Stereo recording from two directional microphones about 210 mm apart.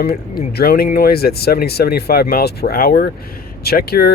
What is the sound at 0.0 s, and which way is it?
Speech, 45° left (ahead or behind).